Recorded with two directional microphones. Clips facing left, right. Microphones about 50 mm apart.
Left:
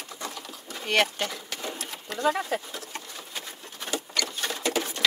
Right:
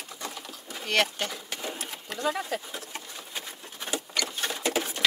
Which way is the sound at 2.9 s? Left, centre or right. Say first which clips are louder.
Left 1 dB; centre.